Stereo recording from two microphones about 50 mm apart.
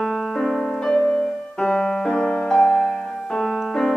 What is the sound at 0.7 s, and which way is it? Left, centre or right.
Piano, centre.